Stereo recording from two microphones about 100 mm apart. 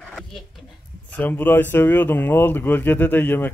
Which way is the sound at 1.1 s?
20° left (ahead or behind).